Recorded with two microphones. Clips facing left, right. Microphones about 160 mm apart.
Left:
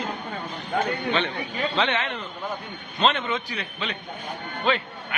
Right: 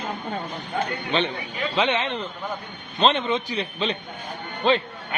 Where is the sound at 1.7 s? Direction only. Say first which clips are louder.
Right 4 dB; 15° right (ahead or behind).